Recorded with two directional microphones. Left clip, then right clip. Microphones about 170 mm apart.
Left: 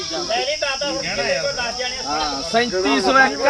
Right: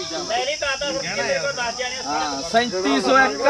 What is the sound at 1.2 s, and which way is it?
Speech, 15° left (ahead or behind).